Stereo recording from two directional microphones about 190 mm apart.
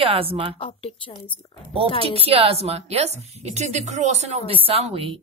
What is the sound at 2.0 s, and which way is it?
A woman's voice, 30° right (ahead or behind).